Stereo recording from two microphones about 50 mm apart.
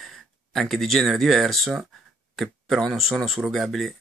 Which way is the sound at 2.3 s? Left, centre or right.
Centre.